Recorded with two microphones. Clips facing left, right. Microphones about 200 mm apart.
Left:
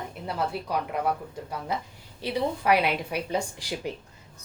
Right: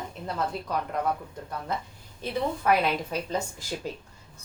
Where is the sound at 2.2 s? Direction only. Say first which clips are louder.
Left 1 dB; 15° left (ahead or behind).